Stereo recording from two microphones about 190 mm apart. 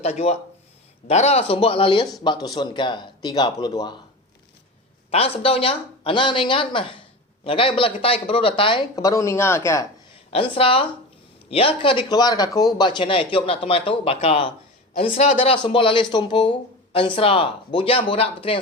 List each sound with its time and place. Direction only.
0.0 s speech: 35° left (ahead or behind)
5.1 s speech: 30° left (ahead or behind); by 9.8 s 15° left (ahead or behind)
10.3 s speech: 30° left (ahead or behind)